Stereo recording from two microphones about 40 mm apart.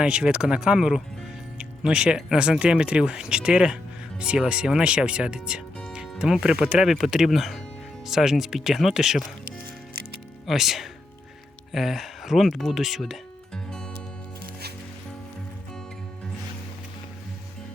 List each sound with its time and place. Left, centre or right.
0.0 s speech: right
1.5 s music: right
2.3 s speech: right
7.1 s speech: centre
10.4 s speech: centre
13.5 s music: centre